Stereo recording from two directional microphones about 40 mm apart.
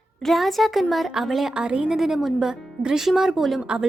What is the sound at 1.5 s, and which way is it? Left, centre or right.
Speech, right.